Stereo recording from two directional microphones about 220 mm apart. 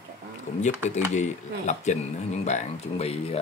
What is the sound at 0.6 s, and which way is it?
Speech, 30° left (ahead or behind).